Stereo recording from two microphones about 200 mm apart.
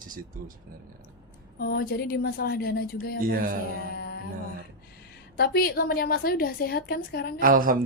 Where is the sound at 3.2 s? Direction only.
45° right (ahead or behind).